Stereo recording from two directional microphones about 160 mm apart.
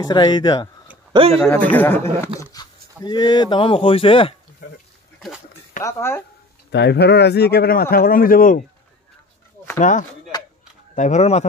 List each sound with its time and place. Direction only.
0.0 s speech: 30° left (ahead or behind)
1.2 s a man's voice: 35° right (ahead or behind)
1.7 s speech: 10° left (ahead or behind)
2.5 s speech: 25° left (ahead or behind)
5.9 s speech: 15° left (ahead or behind)
6.7 s speech: 90° left; by 8.6 s 60° left (ahead or behind)
9.8 s speech: 50° left (ahead or behind)